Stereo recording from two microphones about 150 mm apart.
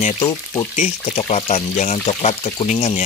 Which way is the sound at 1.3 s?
50° left (ahead or behind).